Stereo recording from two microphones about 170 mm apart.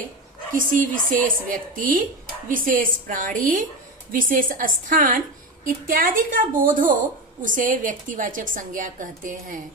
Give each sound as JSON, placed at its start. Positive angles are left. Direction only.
{"t": 0.6, "sound": "speech", "side_deg": -50}